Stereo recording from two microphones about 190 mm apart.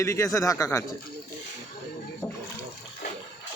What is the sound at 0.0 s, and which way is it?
Speech, 15° left (ahead or behind).